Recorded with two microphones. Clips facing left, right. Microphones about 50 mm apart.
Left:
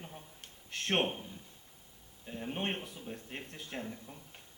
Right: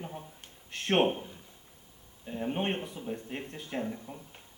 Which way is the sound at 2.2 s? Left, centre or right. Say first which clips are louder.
Right 5 dB; centre.